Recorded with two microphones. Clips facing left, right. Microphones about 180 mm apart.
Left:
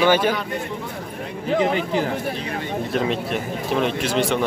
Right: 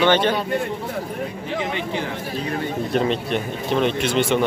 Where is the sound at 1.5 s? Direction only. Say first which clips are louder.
Left 6 dB; 40° left (ahead or behind).